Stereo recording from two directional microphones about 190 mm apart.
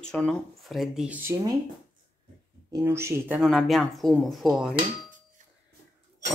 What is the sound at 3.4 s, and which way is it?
Speech, centre (ahead or behind).